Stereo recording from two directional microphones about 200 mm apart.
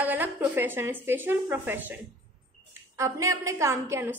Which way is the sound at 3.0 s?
15° right (ahead or behind).